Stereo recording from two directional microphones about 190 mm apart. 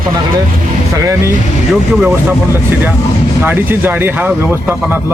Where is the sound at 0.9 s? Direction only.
15° right (ahead or behind).